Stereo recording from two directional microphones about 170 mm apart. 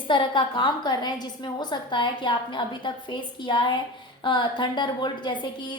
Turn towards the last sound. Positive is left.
turn(degrees=30)  # may be behind; listen again after turning